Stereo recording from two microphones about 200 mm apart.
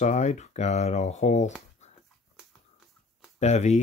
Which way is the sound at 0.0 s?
35° left (ahead or behind).